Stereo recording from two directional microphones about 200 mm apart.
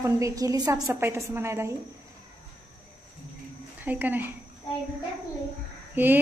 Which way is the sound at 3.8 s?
10° right (ahead or behind).